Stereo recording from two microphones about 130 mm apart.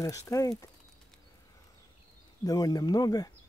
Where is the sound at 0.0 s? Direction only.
25° left (ahead or behind).